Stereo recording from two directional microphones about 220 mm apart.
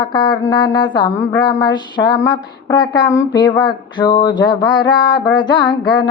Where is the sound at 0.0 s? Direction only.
20° left (ahead or behind).